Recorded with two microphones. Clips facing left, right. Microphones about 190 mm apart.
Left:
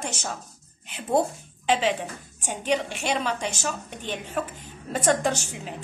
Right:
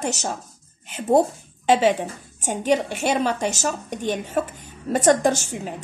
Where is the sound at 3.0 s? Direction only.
45° right (ahead or behind).